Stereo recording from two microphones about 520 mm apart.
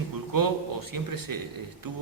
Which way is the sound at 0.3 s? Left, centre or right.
Right.